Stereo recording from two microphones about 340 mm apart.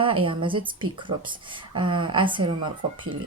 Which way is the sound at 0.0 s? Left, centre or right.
Centre.